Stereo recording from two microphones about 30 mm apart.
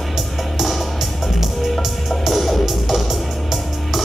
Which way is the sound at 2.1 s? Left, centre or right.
Centre.